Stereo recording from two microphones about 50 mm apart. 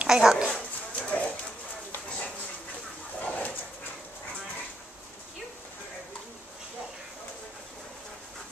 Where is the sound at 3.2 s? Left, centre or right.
Left.